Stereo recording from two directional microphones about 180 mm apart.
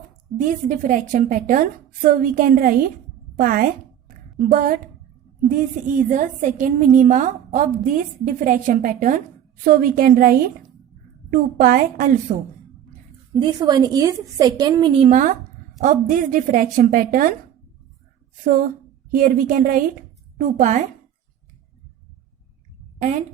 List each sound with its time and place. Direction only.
0.3 s a woman's voice: 45° right (ahead or behind)
13.3 s a woman's voice: 25° right (ahead or behind); by 17.3 s 50° right (ahead or behind)
18.4 s a woman's voice: 50° right (ahead or behind)
23.0 s a woman's voice: 40° right (ahead or behind)